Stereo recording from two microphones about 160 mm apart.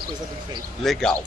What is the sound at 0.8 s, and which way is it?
Speech, centre (ahead or behind).